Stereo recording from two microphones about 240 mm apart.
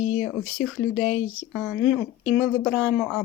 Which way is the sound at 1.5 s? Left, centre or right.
Centre.